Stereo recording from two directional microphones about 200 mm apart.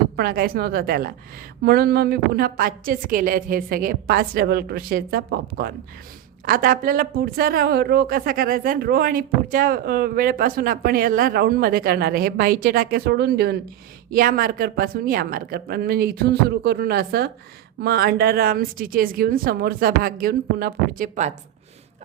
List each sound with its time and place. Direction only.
0.2 s a woman's voice: 50° right (ahead or behind)